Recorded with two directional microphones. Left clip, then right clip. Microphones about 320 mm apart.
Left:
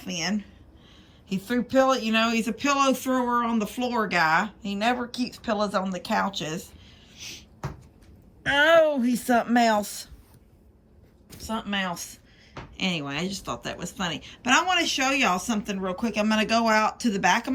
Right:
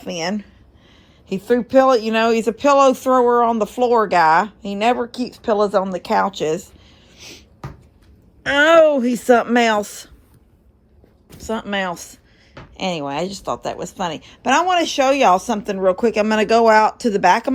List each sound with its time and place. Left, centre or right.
0.0 s speech: centre
7.1 s a sound: centre
8.4 s speech: centre
11.3 s speech: centre